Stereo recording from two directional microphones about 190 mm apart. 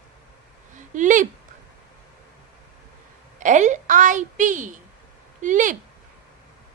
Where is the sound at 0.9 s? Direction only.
45° right (ahead or behind).